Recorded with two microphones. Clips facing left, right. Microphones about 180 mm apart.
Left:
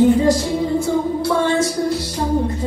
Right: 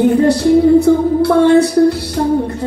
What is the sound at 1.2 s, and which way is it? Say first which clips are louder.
Music: right 11 dB; 60° right (ahead or behind).